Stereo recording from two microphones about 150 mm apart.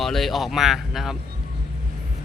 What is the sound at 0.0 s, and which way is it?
Speech, centre (ahead or behind).